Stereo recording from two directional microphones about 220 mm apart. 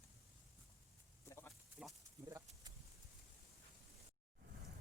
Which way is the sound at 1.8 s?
5° right (ahead or behind).